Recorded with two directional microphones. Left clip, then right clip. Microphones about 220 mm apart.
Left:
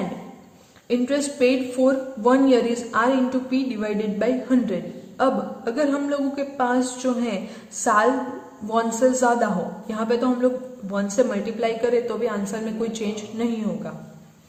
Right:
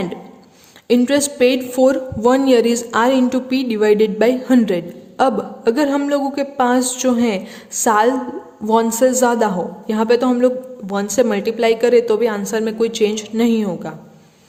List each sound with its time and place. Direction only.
0.9 s a woman's voice: 50° right (ahead or behind)